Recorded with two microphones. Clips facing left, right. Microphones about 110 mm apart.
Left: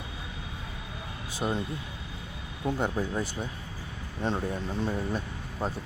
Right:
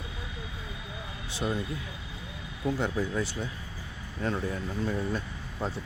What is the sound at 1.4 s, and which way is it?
Speech, 25° left (ahead or behind).